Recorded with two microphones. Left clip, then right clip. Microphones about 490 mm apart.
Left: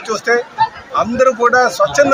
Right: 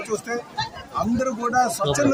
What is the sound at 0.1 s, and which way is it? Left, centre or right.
Speech, right.